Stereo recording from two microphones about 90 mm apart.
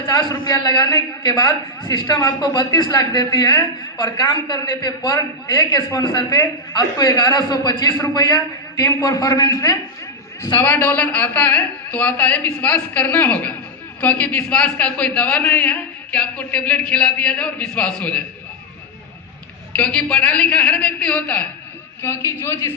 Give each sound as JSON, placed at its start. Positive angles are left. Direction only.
{"t": 0.1, "sound": "a man's voice", "side_deg": 50}
{"t": 10.5, "sound": "a man's voice", "side_deg": 20}
{"t": 19.7, "sound": "a man's voice", "side_deg": 15}
{"t": 22.0, "sound": "a man's voice", "side_deg": 30}